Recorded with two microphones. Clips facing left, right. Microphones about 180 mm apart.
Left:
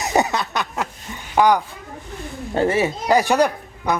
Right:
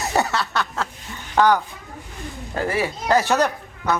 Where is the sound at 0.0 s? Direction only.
15° left (ahead or behind).